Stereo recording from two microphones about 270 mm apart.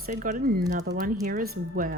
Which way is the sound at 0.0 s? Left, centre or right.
Right.